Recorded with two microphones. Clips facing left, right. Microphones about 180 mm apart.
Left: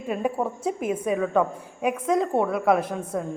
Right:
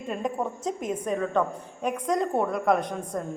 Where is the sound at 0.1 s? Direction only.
5° left (ahead or behind).